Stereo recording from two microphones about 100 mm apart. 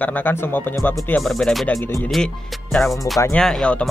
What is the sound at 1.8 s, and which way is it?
Speech, 25° left (ahead or behind).